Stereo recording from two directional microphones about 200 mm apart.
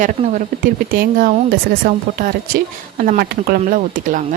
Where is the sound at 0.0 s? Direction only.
35° right (ahead or behind).